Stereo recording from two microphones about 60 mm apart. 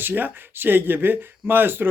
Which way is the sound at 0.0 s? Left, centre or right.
Right.